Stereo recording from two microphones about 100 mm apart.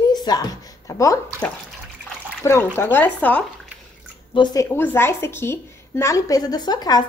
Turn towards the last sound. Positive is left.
turn(degrees=40)  # may be behind; listen again after turning